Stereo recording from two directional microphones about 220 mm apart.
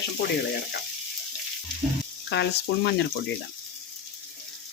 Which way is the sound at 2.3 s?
50° left (ahead or behind).